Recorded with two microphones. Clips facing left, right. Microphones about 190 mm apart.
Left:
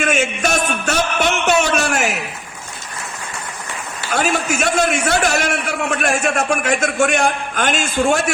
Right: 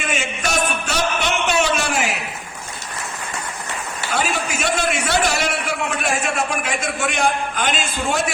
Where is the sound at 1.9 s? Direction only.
50° left (ahead or behind).